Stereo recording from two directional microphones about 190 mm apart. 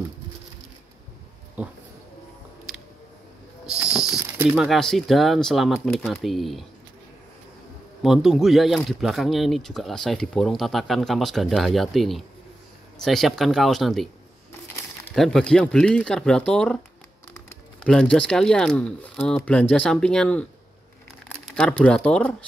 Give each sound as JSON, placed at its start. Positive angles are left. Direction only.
{"t": 3.6, "sound": "speech", "side_deg": -5}
{"t": 8.0, "sound": "speech", "side_deg": 0}
{"t": 15.1, "sound": "speech", "side_deg": 0}
{"t": 17.3, "sound": "music", "side_deg": 15}
{"t": 17.9, "sound": "speech", "side_deg": 5}